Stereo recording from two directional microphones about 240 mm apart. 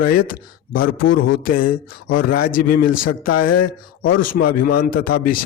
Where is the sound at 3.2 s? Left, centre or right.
Left.